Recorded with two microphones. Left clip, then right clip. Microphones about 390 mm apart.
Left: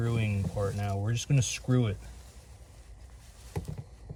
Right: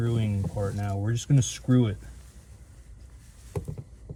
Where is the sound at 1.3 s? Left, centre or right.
Left.